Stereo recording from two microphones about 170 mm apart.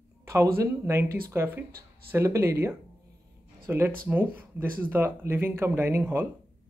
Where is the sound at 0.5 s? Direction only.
15° right (ahead or behind).